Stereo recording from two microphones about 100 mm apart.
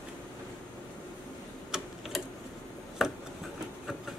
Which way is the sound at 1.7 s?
5° right (ahead or behind).